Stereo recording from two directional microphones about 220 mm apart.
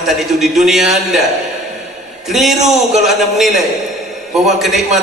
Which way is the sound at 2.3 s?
Centre (ahead or behind).